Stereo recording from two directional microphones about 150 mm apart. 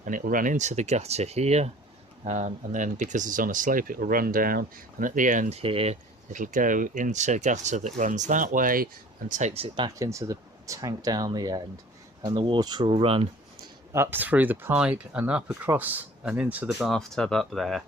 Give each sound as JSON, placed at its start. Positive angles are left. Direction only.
{"t": 0.0, "sound": "speech", "side_deg": -65}
{"t": 5.5, "sound": "speech", "side_deg": -40}
{"t": 6.3, "sound": "speech", "side_deg": -60}
{"t": 9.6, "sound": "speech", "side_deg": -35}
{"t": 10.0, "sound": "speech", "side_deg": -20}
{"t": 13.9, "sound": "speech", "side_deg": -15}